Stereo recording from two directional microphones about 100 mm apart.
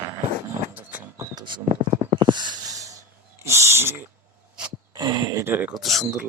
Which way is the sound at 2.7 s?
35° right (ahead or behind).